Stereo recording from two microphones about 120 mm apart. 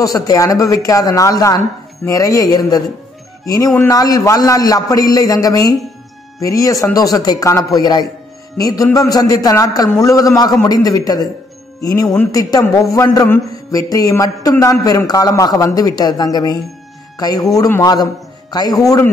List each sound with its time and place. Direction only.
0.0 s a man's voice: 30° left (ahead or behind)